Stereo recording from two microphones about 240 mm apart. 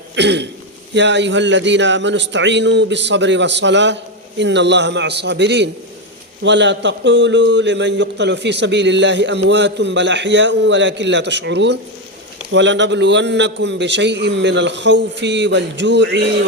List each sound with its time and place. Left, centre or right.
0.2 s a man's voice: right